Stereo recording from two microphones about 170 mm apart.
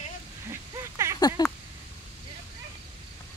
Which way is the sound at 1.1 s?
20° left (ahead or behind).